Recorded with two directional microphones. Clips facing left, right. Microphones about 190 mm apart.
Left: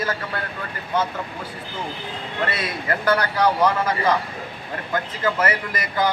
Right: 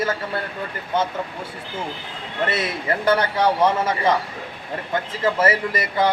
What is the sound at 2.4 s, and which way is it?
A man's voice, 25° right (ahead or behind).